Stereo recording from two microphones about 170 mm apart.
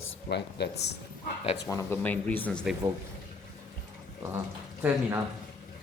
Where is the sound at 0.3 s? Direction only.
80° left.